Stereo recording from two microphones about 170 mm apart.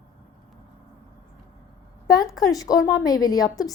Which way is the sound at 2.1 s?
20° left (ahead or behind).